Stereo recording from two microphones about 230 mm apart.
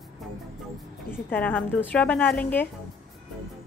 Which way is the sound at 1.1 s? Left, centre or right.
Centre.